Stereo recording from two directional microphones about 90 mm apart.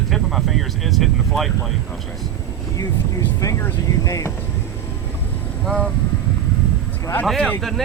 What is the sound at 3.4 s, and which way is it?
Speech, 35° left (ahead or behind).